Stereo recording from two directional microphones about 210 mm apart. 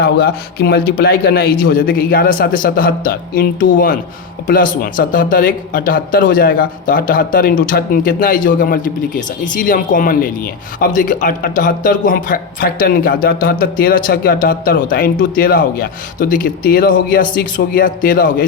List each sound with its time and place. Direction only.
0.0 s a man's voice: 50° left (ahead or behind)